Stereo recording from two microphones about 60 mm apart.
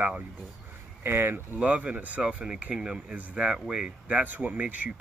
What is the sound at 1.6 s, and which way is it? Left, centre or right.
Speech, right.